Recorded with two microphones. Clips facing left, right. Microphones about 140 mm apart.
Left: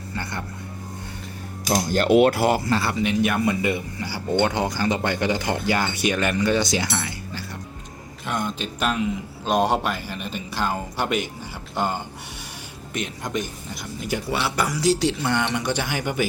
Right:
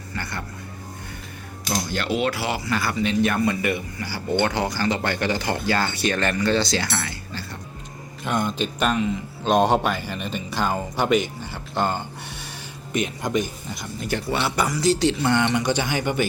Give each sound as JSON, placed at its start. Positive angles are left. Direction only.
{"t": 0.2, "sound": "a sound", "side_deg": 20}
{"t": 1.7, "sound": "speech", "side_deg": 45}
{"t": 2.6, "sound": "speech", "side_deg": 25}
{"t": 3.0, "sound": "speech", "side_deg": 15}
{"t": 8.2, "sound": "speech", "side_deg": 0}
{"t": 12.9, "sound": "speech", "side_deg": 0}
{"t": 14.0, "sound": "speech", "side_deg": 10}